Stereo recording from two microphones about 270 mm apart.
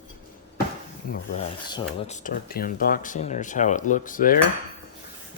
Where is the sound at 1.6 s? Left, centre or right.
Centre.